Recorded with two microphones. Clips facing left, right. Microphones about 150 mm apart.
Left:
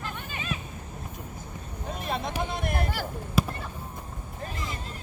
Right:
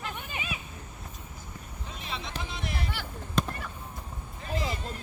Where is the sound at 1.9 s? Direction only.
50° left (ahead or behind).